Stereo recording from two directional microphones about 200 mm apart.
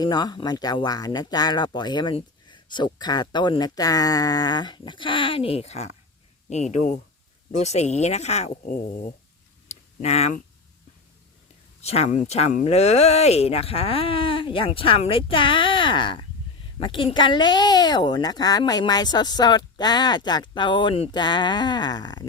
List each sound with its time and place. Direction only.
0.0 s speech: 20° left (ahead or behind); by 8.8 s 40° left (ahead or behind)
9.6 s a sound: 30° left (ahead or behind)
11.8 s speech: 30° left (ahead or behind)